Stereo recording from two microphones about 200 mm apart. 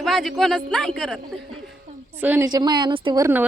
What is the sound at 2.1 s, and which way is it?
A woman's voice, 10° right (ahead or behind).